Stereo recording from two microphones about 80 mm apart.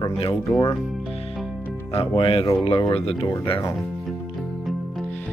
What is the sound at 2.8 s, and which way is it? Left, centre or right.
Speech, left.